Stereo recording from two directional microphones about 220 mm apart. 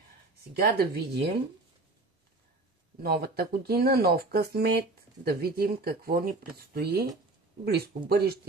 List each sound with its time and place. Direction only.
0.6 s speech: 45° right (ahead or behind)
3.0 s speech: 45° right (ahead or behind)